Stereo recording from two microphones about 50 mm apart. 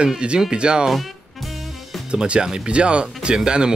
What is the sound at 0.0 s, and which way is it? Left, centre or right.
Speech, centre.